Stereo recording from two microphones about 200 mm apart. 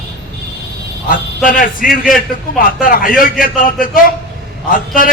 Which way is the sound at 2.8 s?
45° left (ahead or behind).